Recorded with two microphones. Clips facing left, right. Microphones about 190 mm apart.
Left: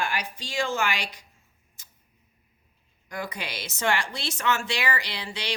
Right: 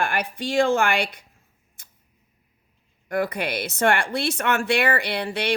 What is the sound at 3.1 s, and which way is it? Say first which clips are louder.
A woman's voice: right 10 dB; 55° right (ahead or behind).